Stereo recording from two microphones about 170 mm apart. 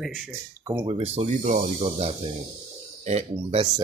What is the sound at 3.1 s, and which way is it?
Speech, 35° right (ahead or behind).